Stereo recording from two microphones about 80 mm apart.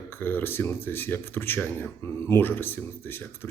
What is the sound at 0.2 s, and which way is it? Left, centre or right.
Speech, left.